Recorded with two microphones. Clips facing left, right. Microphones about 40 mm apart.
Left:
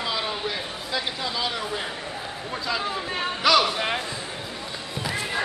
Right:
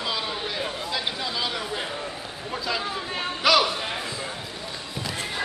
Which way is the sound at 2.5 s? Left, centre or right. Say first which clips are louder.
Left 1 dB; centre.